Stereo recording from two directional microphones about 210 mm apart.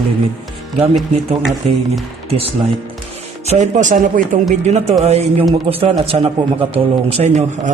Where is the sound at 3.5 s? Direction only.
35° right (ahead or behind).